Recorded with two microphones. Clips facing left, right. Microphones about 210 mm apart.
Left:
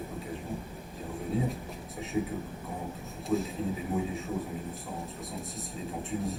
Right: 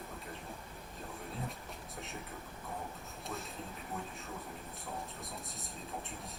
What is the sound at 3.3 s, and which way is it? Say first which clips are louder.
Speech: left 16 dB; 15° left (ahead or behind).